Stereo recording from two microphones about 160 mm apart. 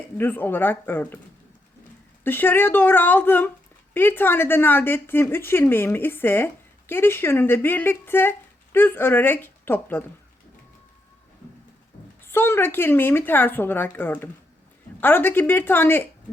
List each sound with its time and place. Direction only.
0.2 s speech: 15° left (ahead or behind)
2.2 s speech: 15° left (ahead or behind)
12.2 s speech: 15° left (ahead or behind)